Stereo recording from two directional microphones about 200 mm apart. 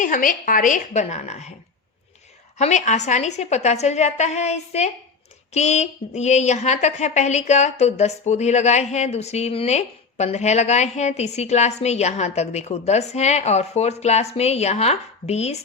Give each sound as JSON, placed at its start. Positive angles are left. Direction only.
{"t": 0.0, "sound": "a woman's voice", "side_deg": 40}
{"t": 2.6, "sound": "a woman's voice", "side_deg": 35}